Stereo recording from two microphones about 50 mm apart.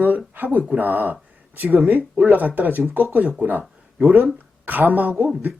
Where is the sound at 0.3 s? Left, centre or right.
Right.